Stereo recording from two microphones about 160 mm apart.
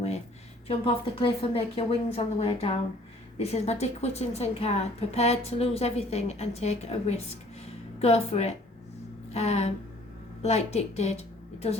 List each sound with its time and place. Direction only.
1.2 s a woman's voice: 35° left (ahead or behind)
9.3 s a sound: 45° left (ahead or behind)
10.4 s a woman's voice: 45° left (ahead or behind)